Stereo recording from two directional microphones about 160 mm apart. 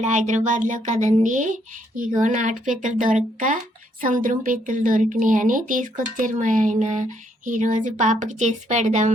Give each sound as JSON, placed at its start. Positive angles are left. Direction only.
{"t": 0.0, "sound": "a woman's voice", "side_deg": -50}